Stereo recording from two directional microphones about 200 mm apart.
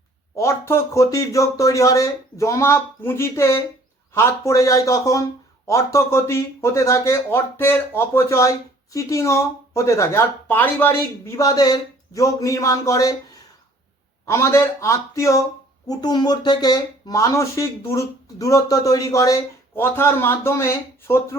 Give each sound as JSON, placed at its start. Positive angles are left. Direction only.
{"t": 0.3, "sound": "speech", "side_deg": 15}
{"t": 14.3, "sound": "speech", "side_deg": 15}